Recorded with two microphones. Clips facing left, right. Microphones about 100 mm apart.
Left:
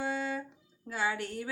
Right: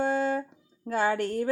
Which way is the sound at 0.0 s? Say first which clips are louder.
Right 8 dB; 45° right (ahead or behind).